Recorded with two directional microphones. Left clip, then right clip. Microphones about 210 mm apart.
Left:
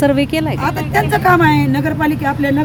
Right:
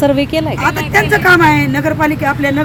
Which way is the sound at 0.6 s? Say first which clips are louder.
Right 6 dB; 20° left (ahead or behind).